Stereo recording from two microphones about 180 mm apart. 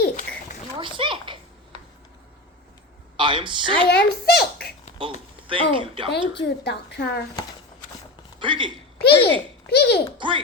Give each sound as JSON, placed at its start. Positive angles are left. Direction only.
{"t": 0.8, "sound": "a sound", "side_deg": -30}
{"t": 3.2, "sound": "a woman's voice", "side_deg": -25}
{"t": 3.8, "sound": "a child's voice", "side_deg": 60}
{"t": 5.0, "sound": "speech", "side_deg": -30}
{"t": 6.3, "sound": "a woman's voice", "side_deg": 70}
{"t": 8.4, "sound": "speech", "side_deg": -25}
{"t": 9.0, "sound": "a child's voice", "side_deg": 65}
{"t": 10.2, "sound": "speech", "side_deg": -25}